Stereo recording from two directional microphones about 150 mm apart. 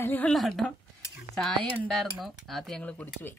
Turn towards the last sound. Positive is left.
turn(degrees=10)  # may be behind; listen again after turning